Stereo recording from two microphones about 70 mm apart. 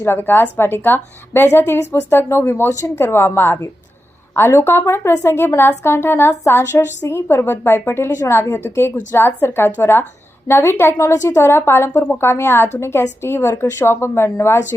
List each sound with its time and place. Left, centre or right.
0.0 s a woman's voice: left
10.9 s a woman's voice: left